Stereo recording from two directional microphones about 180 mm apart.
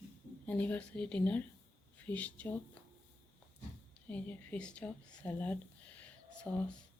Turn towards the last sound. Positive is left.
turn(degrees=5)  # may be behind; listen again after turning